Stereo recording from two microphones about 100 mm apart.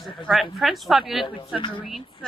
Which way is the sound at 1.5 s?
50° left (ahead or behind).